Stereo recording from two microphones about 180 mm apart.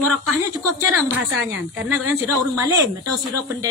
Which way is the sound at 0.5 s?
20° right (ahead or behind).